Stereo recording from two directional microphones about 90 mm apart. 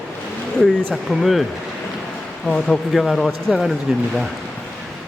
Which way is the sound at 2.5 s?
5° left (ahead or behind).